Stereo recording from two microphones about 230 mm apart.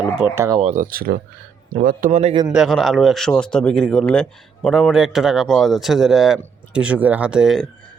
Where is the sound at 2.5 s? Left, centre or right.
Centre.